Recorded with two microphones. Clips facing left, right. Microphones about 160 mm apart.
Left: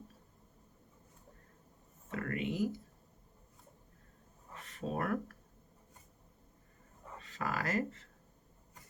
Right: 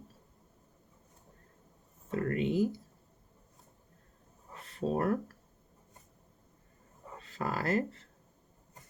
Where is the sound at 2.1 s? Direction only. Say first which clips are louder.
Right 6 dB; 35° right (ahead or behind).